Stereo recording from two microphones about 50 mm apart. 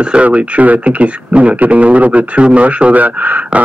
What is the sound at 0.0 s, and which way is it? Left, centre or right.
Speech, right.